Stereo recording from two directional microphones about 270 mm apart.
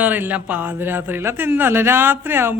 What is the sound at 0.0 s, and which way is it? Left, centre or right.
A man's voice, centre.